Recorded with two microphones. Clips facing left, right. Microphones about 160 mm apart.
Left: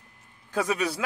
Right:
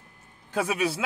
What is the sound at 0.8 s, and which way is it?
Speech, 25° right (ahead or behind).